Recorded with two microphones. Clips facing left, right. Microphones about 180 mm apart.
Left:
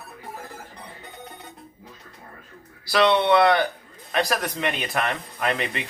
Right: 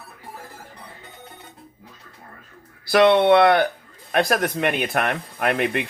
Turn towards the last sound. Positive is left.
turn(degrees=-55)  # may be behind; listen again after turning